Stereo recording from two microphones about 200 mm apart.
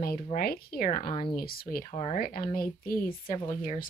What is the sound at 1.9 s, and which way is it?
Speech, 30° left (ahead or behind).